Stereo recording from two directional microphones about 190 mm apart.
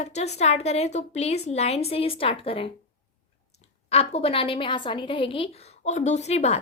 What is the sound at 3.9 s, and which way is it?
A woman's voice, 30° left (ahead or behind).